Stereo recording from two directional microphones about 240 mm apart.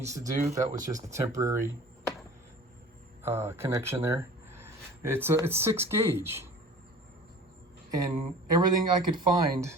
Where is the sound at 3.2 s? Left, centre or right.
Centre.